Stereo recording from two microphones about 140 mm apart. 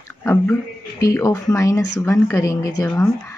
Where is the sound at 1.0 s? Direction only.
25° left (ahead or behind).